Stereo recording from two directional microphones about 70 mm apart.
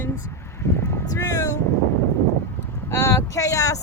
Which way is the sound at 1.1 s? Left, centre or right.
Left.